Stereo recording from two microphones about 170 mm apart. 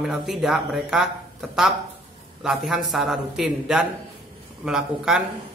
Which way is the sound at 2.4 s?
Centre (ahead or behind).